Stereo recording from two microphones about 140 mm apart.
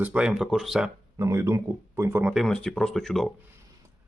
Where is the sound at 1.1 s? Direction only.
20° right (ahead or behind).